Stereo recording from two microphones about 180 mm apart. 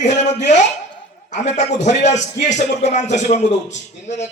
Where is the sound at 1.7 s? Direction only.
40° left (ahead or behind).